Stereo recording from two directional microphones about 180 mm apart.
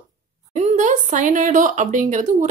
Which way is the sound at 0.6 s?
40° right (ahead or behind).